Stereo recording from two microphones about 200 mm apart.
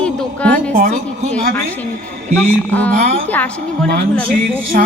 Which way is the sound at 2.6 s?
10° left (ahead or behind).